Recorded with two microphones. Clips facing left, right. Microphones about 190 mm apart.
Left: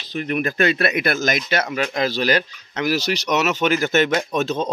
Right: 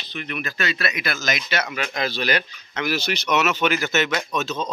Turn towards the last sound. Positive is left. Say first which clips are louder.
# left 4 dB
turn(degrees=55)  # may be behind; listen again after turning